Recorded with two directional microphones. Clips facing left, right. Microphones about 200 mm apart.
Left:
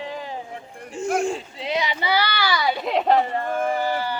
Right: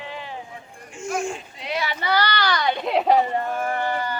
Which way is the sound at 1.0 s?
35° left (ahead or behind).